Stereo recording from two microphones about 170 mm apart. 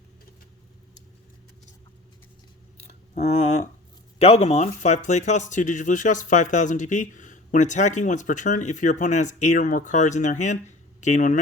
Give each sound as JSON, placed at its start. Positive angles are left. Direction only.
{"t": 3.2, "sound": "a man's voice", "side_deg": 40}